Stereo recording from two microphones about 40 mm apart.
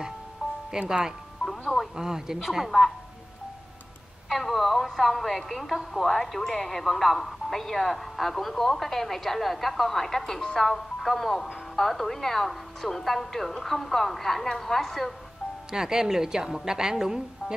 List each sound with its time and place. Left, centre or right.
0.7 s speech: centre
1.4 s music: centre
2.0 s a woman's voice: centre
4.3 s speech: centre
15.7 s a woman's voice: centre